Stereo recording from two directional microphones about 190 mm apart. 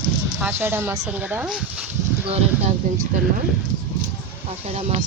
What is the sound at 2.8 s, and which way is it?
Speech, 40° right (ahead or behind).